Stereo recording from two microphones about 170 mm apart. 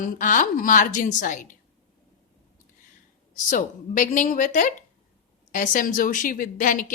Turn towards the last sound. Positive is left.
turn(degrees=55)  # may be behind; listen again after turning